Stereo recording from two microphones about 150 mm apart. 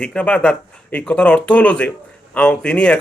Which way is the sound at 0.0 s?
10° left (ahead or behind).